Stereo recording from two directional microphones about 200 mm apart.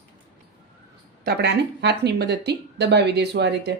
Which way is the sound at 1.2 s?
55° right (ahead or behind).